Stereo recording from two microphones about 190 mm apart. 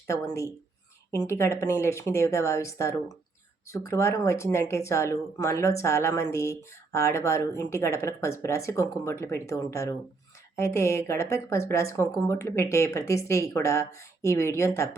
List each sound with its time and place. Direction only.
0.1 s speech: 15° left (ahead or behind)